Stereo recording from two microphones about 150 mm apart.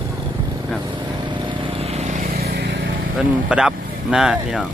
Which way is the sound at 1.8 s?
45° right (ahead or behind).